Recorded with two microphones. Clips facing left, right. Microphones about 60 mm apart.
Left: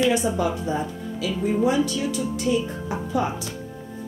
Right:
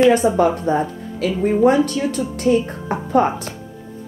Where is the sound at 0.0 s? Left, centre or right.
Right.